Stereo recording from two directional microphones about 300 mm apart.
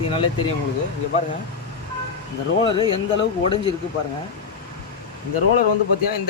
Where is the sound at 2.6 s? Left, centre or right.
Centre.